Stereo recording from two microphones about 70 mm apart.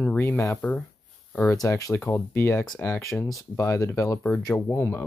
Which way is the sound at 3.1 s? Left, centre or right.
Centre.